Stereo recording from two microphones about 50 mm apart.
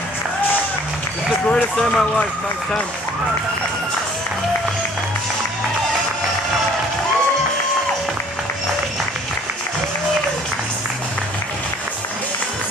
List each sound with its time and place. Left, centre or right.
1.5 s speech: centre